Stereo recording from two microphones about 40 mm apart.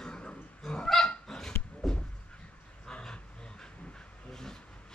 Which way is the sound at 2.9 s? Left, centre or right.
Centre.